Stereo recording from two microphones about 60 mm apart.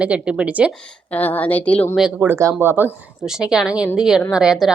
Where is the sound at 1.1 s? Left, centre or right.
Left.